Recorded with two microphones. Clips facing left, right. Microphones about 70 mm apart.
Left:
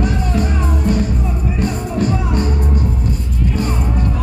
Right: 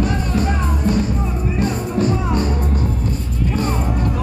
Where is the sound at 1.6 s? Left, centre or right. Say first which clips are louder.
Even; right.